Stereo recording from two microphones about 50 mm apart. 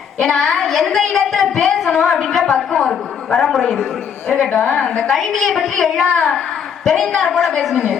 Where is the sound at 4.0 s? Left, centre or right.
Left.